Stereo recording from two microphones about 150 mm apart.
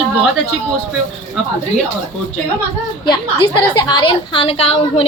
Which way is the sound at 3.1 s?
30° left (ahead or behind).